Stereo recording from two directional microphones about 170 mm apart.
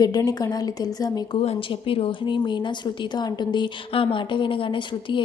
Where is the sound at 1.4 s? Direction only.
35° left (ahead or behind).